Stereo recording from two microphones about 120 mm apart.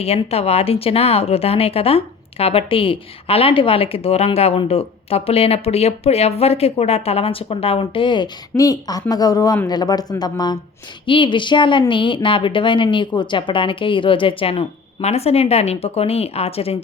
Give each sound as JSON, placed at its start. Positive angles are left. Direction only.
{"t": 0.0, "sound": "speech", "side_deg": 60}
{"t": 7.8, "sound": "speech", "side_deg": 40}
{"t": 8.5, "sound": "a woman's voice", "side_deg": 30}
{"t": 15.0, "sound": "speech", "side_deg": 60}